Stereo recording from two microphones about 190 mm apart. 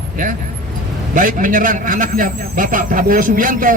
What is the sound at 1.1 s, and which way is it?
A man's voice, 45° right (ahead or behind).